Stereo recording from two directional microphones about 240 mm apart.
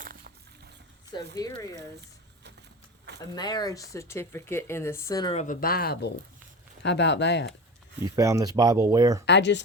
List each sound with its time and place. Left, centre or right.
0.0 s a sound: right
1.4 s speech: centre
1.7 s a sound: right
3.3 s speech: centre; by 7.5 s left
8.1 s speech: centre
9.2 s speech: left